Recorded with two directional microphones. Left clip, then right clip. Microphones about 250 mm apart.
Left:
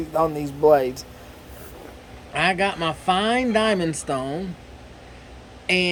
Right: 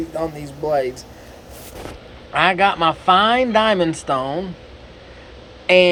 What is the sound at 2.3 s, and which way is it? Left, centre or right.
Speech, centre.